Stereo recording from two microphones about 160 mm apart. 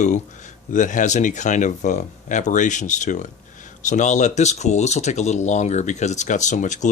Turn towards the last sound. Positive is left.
turn(degrees=50)  # may be behind; listen again after turning